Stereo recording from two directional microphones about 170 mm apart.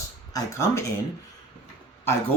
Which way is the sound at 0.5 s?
15° left (ahead or behind).